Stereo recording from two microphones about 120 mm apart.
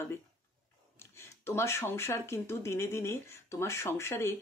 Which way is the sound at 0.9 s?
20° left (ahead or behind).